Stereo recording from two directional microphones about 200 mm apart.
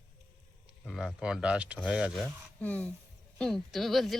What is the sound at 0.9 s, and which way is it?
Speech, centre (ahead or behind).